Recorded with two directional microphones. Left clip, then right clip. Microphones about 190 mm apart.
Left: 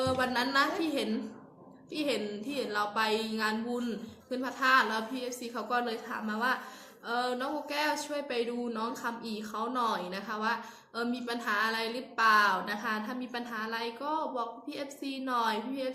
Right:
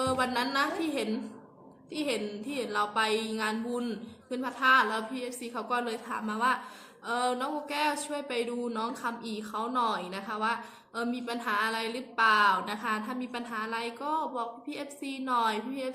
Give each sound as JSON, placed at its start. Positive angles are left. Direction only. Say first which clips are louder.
{"t": 0.0, "sound": "a woman's voice", "louder": "right 1 dB", "side_deg": -20}